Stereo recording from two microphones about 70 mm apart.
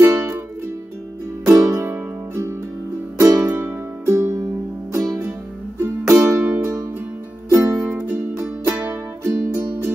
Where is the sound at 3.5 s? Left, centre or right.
Right.